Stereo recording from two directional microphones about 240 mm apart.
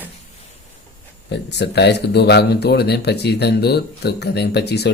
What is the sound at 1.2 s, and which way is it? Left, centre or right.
Speech, left.